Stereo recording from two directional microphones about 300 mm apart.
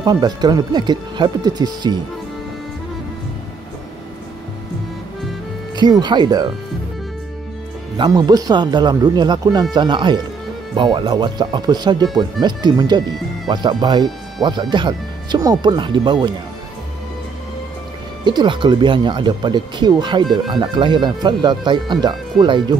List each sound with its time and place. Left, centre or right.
0.0 s speech: centre
5.8 s speech: centre
8.0 s speech: centre
18.2 s speech: centre